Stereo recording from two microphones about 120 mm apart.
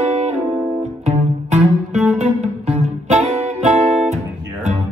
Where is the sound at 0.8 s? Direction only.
70° right (ahead or behind).